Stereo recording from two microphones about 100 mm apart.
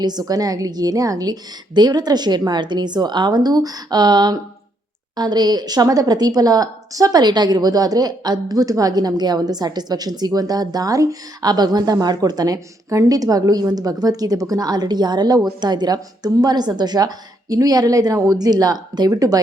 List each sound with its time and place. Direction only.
0.0 s a woman's voice: 45° right (ahead or behind)